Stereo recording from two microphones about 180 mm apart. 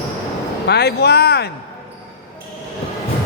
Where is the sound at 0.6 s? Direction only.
65° left (ahead or behind).